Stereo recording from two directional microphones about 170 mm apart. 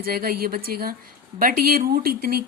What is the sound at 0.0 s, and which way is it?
Speech, 60° right (ahead or behind).